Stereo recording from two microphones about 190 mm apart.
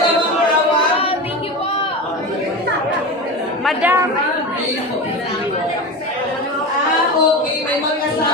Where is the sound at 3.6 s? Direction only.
10° right (ahead or behind).